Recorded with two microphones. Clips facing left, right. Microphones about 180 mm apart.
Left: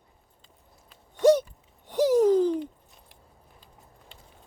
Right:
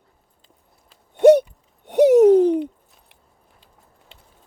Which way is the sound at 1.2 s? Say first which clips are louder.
Right 8 dB; 60° right (ahead or behind).